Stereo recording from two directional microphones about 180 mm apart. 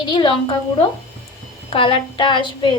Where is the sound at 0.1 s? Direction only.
25° left (ahead or behind).